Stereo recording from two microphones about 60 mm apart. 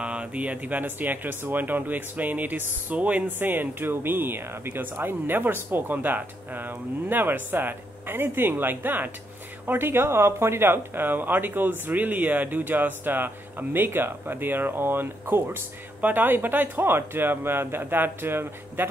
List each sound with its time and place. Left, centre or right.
0.0 s speech: centre; by 18.9 s right